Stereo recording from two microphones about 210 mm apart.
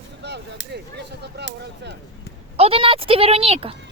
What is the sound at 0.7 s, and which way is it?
Speech, 50° right (ahead or behind).